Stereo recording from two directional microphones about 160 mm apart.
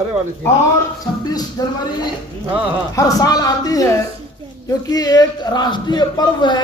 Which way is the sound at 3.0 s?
20° left (ahead or behind).